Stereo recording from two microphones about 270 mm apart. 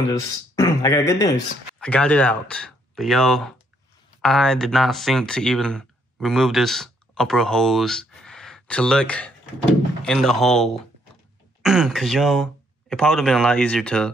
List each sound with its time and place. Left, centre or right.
0.1 s speech: centre